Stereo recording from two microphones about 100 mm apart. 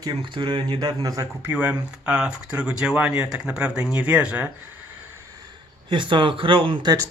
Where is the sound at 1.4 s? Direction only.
15° right (ahead or behind).